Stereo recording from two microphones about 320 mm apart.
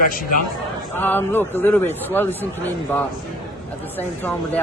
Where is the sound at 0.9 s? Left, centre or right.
Centre.